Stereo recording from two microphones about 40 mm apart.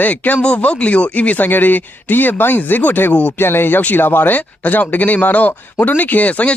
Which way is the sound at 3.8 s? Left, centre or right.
Left.